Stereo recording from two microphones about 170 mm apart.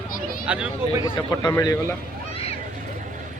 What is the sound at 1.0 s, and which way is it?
Speech, 25° left (ahead or behind).